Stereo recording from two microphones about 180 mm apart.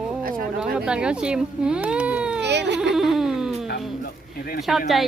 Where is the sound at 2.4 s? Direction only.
75° right (ahead or behind).